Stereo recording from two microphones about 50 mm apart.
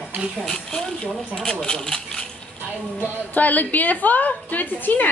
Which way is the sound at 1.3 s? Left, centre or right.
Centre.